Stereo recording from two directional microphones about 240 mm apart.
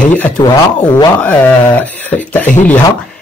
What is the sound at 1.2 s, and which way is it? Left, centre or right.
Speech, centre.